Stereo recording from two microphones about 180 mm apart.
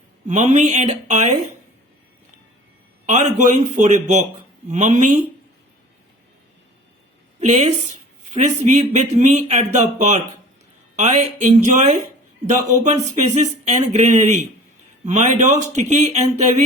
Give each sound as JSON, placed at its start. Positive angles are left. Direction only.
{"t": 0.3, "sound": "speech", "side_deg": -40}
{"t": 3.1, "sound": "speech", "side_deg": -40}
{"t": 7.3, "sound": "speech", "side_deg": -40}